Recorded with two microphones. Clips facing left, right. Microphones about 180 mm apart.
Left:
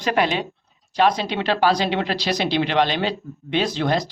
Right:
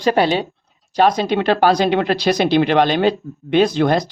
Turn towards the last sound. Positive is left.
turn(degrees=-50)  # may be behind; listen again after turning